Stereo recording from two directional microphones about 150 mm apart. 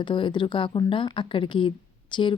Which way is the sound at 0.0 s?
35° left (ahead or behind).